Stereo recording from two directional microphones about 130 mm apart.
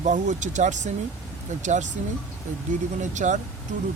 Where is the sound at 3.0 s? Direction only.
70° right (ahead or behind).